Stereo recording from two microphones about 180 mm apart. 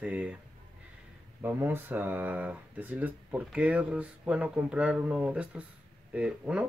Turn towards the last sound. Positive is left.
turn(degrees=-5)  # may be behind; listen again after turning